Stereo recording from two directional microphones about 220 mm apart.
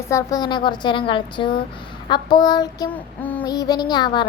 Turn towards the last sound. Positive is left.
turn(degrees=20)  # may be behind; listen again after turning